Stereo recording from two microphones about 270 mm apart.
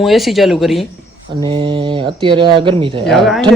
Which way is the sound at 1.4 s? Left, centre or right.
Centre.